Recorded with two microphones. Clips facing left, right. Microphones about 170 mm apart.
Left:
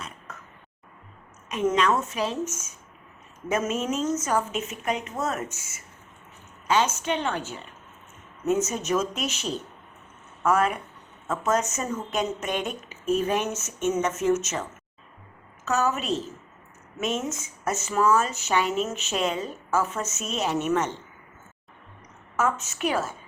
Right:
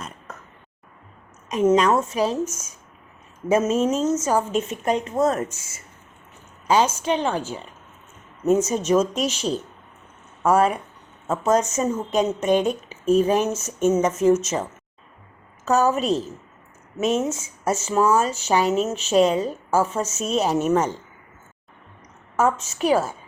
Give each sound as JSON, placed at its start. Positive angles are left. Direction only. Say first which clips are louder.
{"t": 1.7, "sound": "a woman's voice", "louder": "right 6 dB", "side_deg": -35}
{"t": 3.5, "sound": "a woman's voice", "louder": "right 7 dB", "side_deg": -30}
{"t": 6.7, "sound": "a woman's voice", "louder": "right 4 dB", "side_deg": -35}
{"t": 22.4, "sound": "a woman's voice", "louder": "right 5 dB", "side_deg": -35}